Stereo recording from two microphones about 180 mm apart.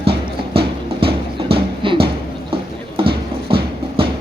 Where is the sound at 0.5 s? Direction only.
30° right (ahead or behind).